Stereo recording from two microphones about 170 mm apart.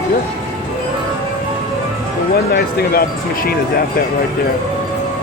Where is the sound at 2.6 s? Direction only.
60° left (ahead or behind).